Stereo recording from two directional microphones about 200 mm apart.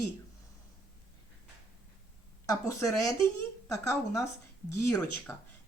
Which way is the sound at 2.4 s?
15° left (ahead or behind).